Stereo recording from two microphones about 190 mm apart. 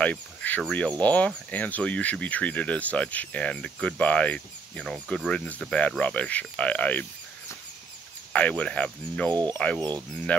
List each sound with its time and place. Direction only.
0.0 s speech: 10° left (ahead or behind)
8.3 s speech: 5° left (ahead or behind)
9.3 s speech: 20° right (ahead or behind)